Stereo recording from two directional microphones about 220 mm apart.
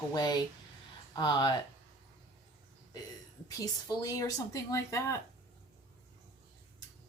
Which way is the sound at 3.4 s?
15° left (ahead or behind).